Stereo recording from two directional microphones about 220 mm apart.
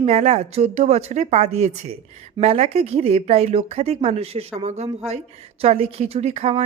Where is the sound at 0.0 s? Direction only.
30° right (ahead or behind).